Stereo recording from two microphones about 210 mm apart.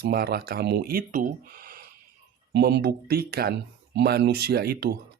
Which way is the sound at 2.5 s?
50° right (ahead or behind).